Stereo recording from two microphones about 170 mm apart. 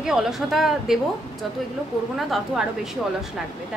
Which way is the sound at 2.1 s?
Centre (ahead or behind).